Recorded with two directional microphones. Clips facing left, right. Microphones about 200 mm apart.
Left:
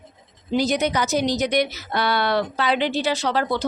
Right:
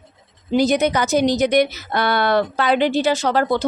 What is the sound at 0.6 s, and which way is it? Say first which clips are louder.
A woman's voice: right 4 dB; 50° right (ahead or behind).